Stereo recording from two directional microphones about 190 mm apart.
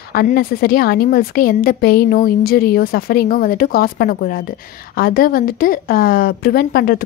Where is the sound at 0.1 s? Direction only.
55° left (ahead or behind).